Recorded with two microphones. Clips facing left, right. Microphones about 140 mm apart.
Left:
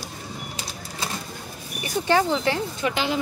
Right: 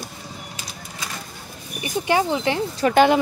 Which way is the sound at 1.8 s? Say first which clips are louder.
Even; 15° right (ahead or behind).